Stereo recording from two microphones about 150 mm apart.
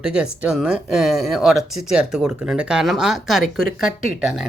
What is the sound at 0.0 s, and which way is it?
Speech, 5° right (ahead or behind).